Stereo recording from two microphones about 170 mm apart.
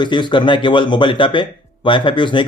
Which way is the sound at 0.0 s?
25° left (ahead or behind).